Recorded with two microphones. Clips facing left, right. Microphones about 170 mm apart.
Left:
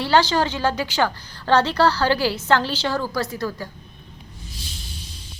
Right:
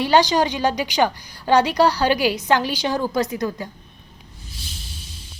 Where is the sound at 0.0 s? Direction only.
15° right (ahead or behind).